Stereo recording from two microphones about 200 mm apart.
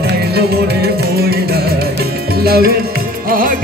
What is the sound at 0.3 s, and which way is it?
Music, 55° right (ahead or behind).